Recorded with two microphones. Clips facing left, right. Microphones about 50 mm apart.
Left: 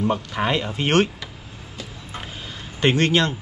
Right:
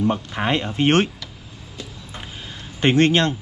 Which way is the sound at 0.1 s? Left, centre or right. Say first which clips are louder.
Left 1 dB; centre.